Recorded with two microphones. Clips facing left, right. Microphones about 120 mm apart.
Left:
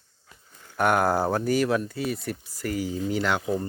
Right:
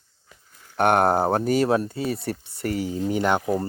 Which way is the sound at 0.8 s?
60° right (ahead or behind).